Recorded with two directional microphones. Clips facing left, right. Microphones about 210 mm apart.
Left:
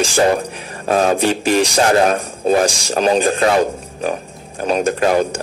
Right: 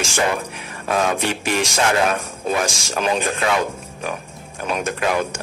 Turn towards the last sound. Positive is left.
turn(degrees=35)  # may be behind; listen again after turning